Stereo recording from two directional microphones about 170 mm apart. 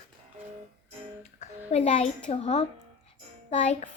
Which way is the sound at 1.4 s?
45° left (ahead or behind).